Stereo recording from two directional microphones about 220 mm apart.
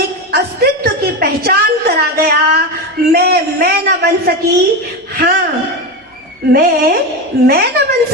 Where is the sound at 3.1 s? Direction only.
45° right (ahead or behind).